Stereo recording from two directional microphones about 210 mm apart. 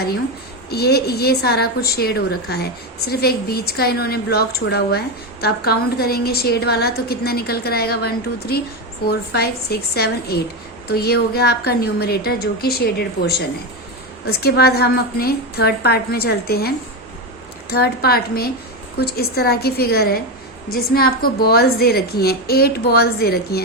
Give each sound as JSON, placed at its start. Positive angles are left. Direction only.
{"t": 0.7, "sound": "a woman's voice", "side_deg": 50}
{"t": 14.3, "sound": "a woman's voice", "side_deg": 50}